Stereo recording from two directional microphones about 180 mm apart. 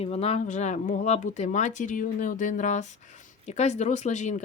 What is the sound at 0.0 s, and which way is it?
Speech, 35° left (ahead or behind).